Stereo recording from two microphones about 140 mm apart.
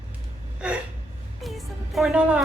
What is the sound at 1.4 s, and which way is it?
Music, centre (ahead or behind).